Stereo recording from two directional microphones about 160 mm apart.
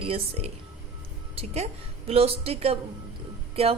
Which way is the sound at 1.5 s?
40° right (ahead or behind).